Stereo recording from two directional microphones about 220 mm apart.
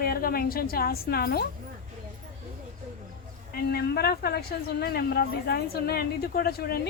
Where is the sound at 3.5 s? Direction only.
45° left (ahead or behind).